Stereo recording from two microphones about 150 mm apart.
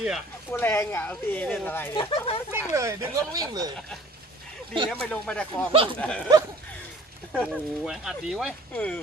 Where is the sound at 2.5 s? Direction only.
20° right (ahead or behind).